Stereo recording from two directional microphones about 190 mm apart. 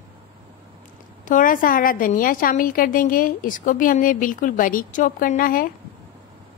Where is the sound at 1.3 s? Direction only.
45° left (ahead or behind).